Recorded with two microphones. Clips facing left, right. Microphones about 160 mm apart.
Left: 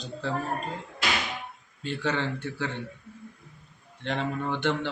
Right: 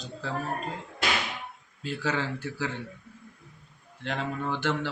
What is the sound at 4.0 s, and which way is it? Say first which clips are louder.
Speech: left 2 dB; 5° right (ahead or behind).